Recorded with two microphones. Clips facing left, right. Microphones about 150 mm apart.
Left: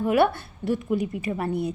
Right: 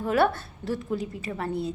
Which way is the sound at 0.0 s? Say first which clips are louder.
Left 3 dB; 15° left (ahead or behind).